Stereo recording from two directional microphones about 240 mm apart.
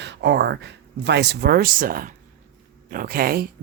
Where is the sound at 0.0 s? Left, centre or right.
Right.